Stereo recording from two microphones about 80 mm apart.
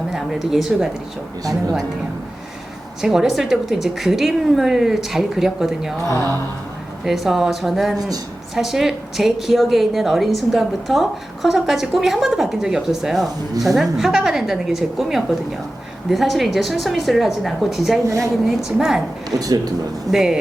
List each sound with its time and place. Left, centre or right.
0.1 s a woman's voice: centre
3.0 s a woman's voice: centre
7.0 s a woman's voice: centre
19.3 s speech: right
20.1 s speech: centre